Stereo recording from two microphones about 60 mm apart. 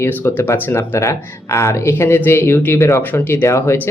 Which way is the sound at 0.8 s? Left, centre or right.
Left.